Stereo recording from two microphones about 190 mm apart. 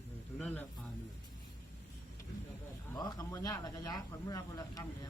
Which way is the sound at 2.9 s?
20° left (ahead or behind).